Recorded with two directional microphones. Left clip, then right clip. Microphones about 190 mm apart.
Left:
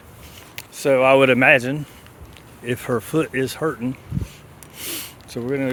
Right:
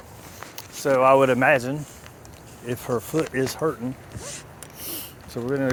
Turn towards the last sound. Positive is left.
turn(degrees=25)  # may be behind; listen again after turning